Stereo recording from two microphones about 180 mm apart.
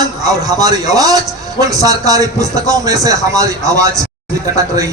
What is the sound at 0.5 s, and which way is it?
A man's voice, 20° right (ahead or behind).